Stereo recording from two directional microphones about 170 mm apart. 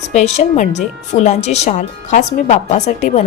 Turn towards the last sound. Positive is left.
turn(degrees=45)  # may be behind; listen again after turning